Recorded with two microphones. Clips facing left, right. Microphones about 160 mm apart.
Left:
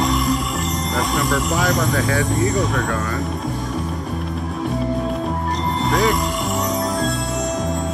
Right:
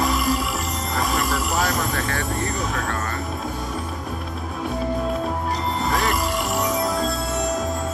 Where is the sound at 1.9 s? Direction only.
20° left (ahead or behind).